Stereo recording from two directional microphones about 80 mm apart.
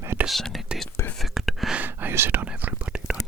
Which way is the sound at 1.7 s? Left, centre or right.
Right.